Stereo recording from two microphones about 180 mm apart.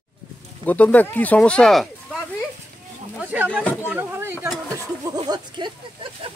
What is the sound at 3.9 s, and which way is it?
Speech, 10° right (ahead or behind).